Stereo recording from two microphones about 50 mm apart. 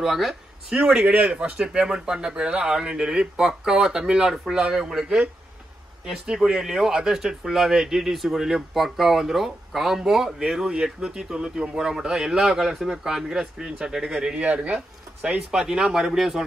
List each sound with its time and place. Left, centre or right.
0.0 s speech: centre
1.0 s speech: right
6.0 s speech: centre
14.3 s speech: right; by 16.4 s centre